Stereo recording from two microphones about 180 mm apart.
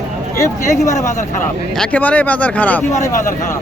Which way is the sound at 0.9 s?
40° left (ahead or behind).